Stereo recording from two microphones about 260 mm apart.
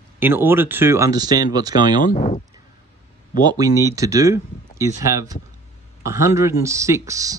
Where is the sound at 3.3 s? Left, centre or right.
Centre.